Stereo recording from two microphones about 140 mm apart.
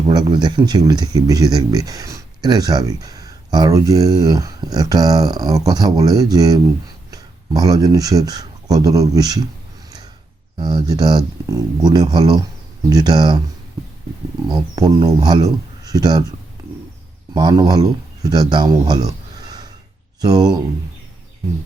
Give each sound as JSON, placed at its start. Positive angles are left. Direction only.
{"t": 0.1, "sound": "speech", "side_deg": -30}
{"t": 10.6, "sound": "speech", "side_deg": -30}
{"t": 14.4, "sound": "speech", "side_deg": -30}
{"t": 17.3, "sound": "speech", "side_deg": -30}